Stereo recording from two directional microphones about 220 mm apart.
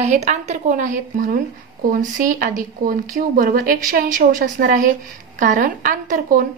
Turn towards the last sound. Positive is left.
turn(degrees=-40)  # may be behind; listen again after turning